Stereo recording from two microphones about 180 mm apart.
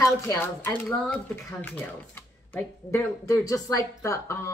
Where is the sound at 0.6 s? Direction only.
5° left (ahead or behind).